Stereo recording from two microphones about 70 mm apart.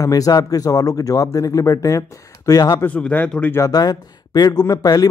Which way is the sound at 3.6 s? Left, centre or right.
Left.